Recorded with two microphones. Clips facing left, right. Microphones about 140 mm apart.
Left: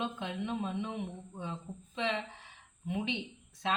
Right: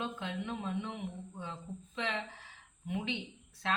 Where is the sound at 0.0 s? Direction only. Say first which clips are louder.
Left 2 dB; 20° left (ahead or behind).